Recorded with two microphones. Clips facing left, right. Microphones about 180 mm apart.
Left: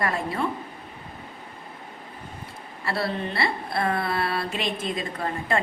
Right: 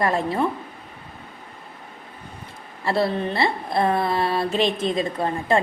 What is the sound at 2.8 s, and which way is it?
A woman's voice, 20° right (ahead or behind).